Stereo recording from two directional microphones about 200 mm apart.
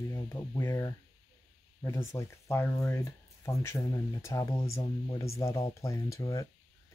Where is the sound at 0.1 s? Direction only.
15° left (ahead or behind).